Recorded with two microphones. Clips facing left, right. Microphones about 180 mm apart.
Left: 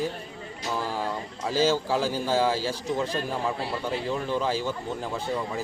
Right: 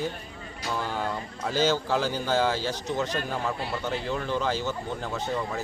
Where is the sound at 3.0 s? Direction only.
30° left (ahead or behind).